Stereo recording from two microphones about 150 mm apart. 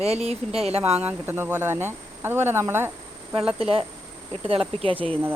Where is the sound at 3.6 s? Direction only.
40° right (ahead or behind).